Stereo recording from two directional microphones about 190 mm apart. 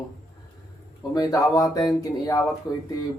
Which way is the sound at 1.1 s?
20° left (ahead or behind).